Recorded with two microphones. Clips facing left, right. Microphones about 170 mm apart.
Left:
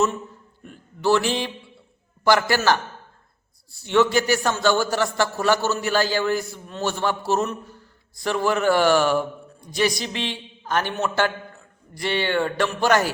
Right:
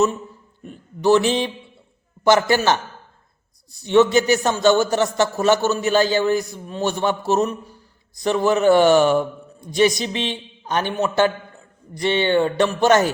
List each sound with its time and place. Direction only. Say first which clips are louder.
0.7 s a man's voice: right 4 dB; 20° right (ahead or behind)